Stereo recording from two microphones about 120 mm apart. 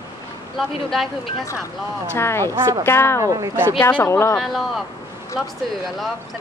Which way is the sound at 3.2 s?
25° right (ahead or behind).